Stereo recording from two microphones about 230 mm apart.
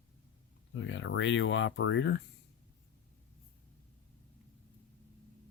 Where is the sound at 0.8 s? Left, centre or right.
Left.